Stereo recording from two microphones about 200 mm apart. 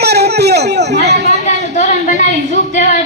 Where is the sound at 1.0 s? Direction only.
60° right (ahead or behind).